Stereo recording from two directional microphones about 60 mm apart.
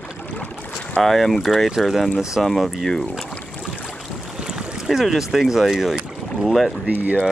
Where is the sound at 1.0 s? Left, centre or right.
Centre.